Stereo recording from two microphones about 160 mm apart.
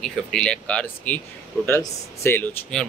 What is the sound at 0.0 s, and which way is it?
Speech, 5° left (ahead or behind).